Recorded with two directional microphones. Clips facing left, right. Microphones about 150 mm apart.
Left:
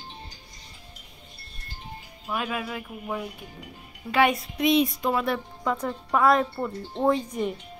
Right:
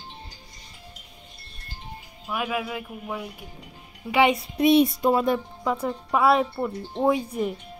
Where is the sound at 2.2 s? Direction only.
5° right (ahead or behind).